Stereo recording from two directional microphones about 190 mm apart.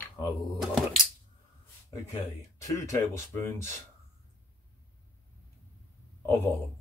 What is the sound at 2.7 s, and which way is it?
Speech, 15° left (ahead or behind).